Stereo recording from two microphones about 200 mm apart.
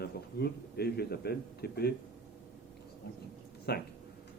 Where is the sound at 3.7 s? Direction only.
55° left (ahead or behind).